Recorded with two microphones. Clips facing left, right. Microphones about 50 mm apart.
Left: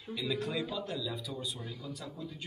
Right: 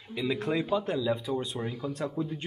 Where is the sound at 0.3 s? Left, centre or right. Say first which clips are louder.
Right 7 dB; right.